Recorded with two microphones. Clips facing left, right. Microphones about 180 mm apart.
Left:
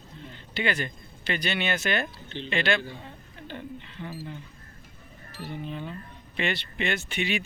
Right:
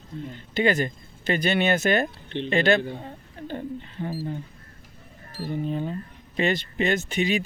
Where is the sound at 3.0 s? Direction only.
40° right (ahead or behind).